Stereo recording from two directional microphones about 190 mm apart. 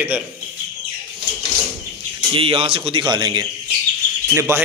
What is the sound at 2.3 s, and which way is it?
A man's voice, 30° right (ahead or behind).